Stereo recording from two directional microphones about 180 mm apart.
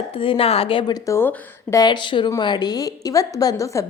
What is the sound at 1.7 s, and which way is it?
A woman's voice, 25° left (ahead or behind).